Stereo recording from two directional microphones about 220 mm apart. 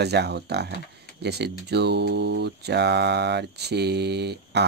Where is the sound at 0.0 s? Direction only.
50° right (ahead or behind).